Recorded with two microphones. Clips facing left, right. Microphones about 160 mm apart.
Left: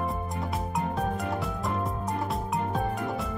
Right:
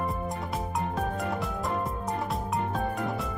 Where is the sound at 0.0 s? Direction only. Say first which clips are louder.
Even; centre (ahead or behind).